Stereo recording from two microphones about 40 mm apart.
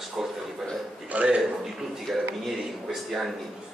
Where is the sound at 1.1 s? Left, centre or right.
Right.